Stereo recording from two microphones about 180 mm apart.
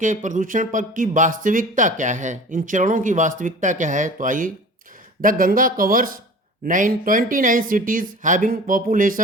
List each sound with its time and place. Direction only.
0.0 s speech: 45° right (ahead or behind)